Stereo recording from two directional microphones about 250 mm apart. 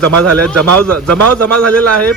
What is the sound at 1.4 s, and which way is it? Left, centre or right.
Speech, right.